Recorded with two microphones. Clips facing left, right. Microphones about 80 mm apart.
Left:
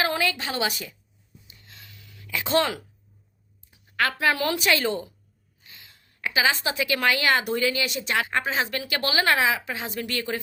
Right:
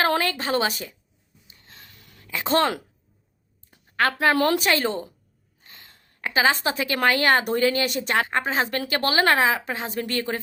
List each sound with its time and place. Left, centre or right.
0.2 s a woman's voice: right
1.5 s a sound: right
2.2 s a woman's voice: right
3.9 s a woman's voice: right